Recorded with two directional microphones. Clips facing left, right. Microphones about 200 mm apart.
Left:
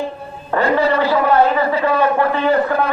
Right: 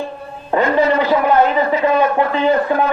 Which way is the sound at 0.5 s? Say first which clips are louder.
Right 2 dB; 15° right (ahead or behind).